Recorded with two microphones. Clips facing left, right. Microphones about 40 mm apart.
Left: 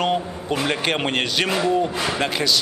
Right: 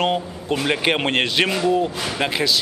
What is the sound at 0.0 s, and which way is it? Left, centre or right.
A man's voice, centre.